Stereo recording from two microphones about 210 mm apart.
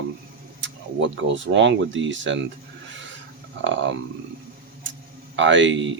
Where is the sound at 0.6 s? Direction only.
60° right (ahead or behind).